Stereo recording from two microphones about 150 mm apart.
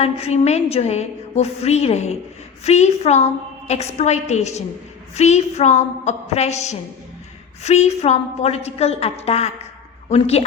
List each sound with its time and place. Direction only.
0.0 s a woman's voice: 45° left (ahead or behind)